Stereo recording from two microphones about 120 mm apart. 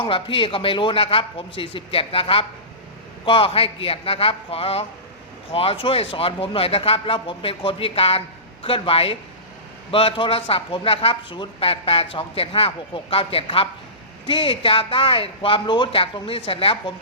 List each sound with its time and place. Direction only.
0.0 s speech: 45° left (ahead or behind)